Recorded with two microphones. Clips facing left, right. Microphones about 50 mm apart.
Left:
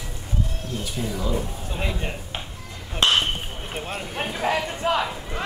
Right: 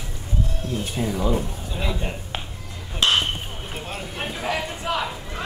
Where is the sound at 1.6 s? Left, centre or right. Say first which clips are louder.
Right 1 dB; left.